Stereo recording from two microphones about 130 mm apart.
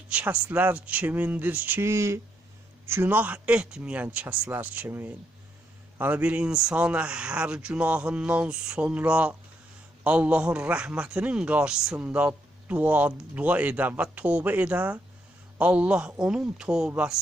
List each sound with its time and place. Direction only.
0.1 s a man's voice: 10° right (ahead or behind)